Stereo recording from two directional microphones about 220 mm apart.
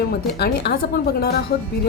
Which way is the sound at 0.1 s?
45° left (ahead or behind).